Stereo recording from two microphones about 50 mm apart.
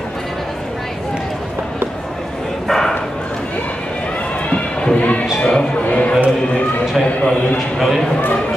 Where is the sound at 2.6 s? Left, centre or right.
Centre.